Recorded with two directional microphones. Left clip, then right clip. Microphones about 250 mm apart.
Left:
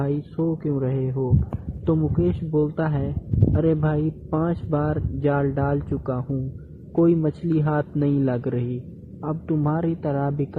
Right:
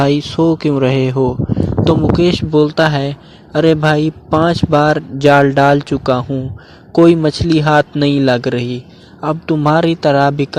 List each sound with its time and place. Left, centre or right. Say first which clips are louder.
0.0 s speech: right 13 dB; right